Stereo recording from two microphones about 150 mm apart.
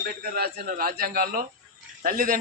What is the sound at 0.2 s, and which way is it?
A man's voice, 90° right.